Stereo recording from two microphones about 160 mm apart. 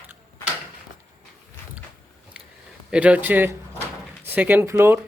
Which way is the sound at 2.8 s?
5° right (ahead or behind).